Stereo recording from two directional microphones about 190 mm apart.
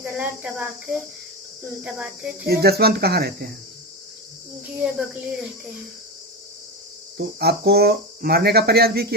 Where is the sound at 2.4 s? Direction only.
55° right (ahead or behind).